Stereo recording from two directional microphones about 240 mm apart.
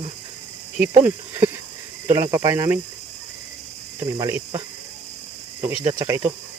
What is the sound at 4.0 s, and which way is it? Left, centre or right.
Speech, centre.